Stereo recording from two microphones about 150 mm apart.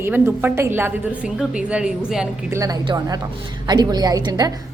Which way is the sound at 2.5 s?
20° right (ahead or behind).